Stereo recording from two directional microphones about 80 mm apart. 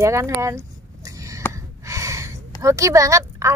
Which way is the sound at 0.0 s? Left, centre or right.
Right.